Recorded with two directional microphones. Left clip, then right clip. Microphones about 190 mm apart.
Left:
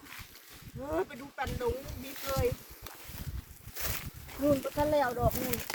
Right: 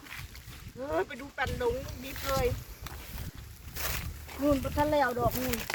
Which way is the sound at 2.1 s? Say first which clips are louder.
Right 2 dB; centre (ahead or behind).